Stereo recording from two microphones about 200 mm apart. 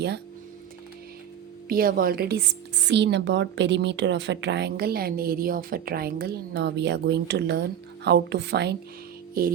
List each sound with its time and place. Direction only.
1.6 s a woman's voice: 45° right (ahead or behind)
9.4 s music: 45° right (ahead or behind)